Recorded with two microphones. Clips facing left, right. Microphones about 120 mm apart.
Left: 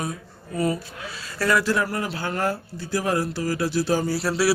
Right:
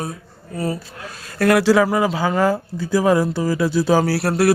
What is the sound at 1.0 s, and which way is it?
Speech, 50° right (ahead or behind).